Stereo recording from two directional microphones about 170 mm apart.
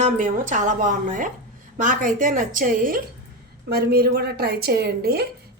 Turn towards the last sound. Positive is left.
turn(degrees=-65)  # may be behind; listen again after turning